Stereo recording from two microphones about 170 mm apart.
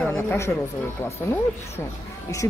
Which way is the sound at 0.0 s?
5° left (ahead or behind).